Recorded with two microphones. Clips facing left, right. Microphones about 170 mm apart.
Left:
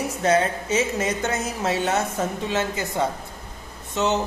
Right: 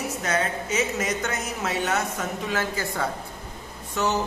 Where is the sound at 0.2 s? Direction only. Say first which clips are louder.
Left 7 dB; 30° left (ahead or behind).